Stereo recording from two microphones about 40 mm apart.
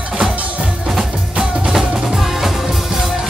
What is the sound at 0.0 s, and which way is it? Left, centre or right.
Music, right.